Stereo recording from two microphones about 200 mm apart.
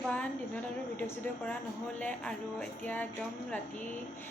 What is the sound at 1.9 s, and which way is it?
A woman's voice, 5° left (ahead or behind).